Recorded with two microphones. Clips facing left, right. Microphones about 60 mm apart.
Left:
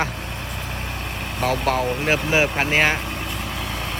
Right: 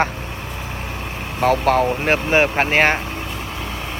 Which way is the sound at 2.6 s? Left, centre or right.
Right.